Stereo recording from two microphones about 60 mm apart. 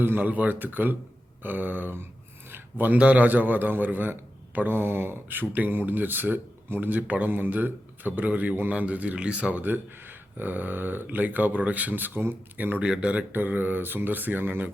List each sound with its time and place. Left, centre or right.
0.0 s a man's voice: right
2.5 s a sound: right
3.0 s a man's voice: right
12.8 s speech: centre
13.3 s a man's voice: right